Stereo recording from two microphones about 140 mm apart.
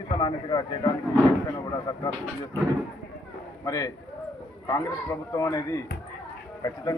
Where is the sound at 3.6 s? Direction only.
25° left (ahead or behind).